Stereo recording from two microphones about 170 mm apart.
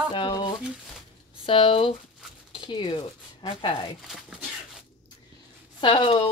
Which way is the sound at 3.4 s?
30° left (ahead or behind).